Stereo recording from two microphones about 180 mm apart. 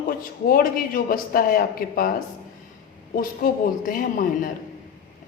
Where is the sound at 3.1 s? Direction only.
50° left (ahead or behind).